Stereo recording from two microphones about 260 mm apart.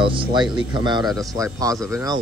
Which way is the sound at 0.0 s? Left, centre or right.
Centre.